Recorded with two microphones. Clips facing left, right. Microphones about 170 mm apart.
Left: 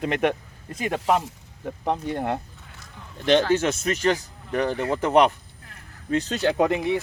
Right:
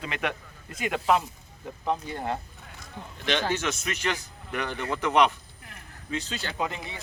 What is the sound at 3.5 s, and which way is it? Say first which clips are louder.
Speech: left 7 dB; 35° left (ahead or behind).